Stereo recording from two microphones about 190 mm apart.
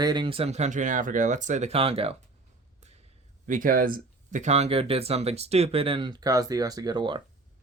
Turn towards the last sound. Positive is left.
turn(degrees=-25)  # may be behind; listen again after turning